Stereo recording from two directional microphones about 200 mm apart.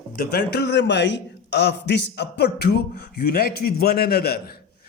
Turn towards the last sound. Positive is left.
turn(degrees=50)  # may be behind; listen again after turning